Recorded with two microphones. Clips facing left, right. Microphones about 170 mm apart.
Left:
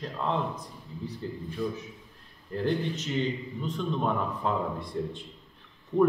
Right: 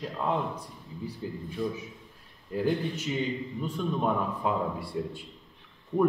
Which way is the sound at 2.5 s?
10° right (ahead or behind).